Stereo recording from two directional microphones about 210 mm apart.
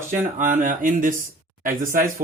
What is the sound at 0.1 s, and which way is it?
Speech, 35° right (ahead or behind).